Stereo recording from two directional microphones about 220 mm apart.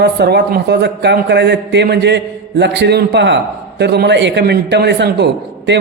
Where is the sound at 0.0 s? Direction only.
50° right (ahead or behind).